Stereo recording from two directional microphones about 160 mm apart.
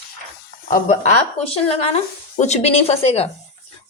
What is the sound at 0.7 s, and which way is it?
A woman's voice, 45° left (ahead or behind).